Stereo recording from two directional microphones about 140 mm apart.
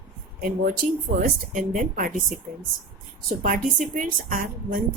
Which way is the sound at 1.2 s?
70° right (ahead or behind).